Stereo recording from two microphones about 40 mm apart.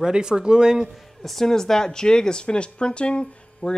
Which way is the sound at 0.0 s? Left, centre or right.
Centre.